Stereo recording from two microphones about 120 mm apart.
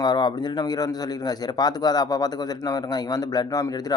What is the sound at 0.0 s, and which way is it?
Speech, 35° left (ahead or behind).